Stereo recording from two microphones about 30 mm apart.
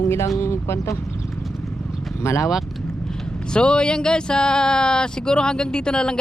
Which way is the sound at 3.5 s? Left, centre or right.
Left.